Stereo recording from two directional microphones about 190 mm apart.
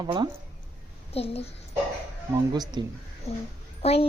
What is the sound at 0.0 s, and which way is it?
Speech, 25° right (ahead or behind).